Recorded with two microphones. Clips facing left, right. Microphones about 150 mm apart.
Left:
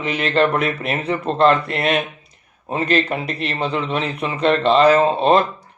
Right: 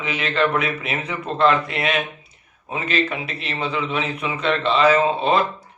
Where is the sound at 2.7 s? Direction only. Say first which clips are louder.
Left 4 dB; 45° left (ahead or behind).